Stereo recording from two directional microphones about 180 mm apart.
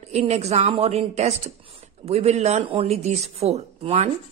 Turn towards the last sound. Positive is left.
turn(degrees=-35)  # may be behind; listen again after turning